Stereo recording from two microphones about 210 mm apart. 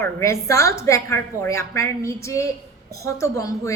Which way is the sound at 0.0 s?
15° left (ahead or behind).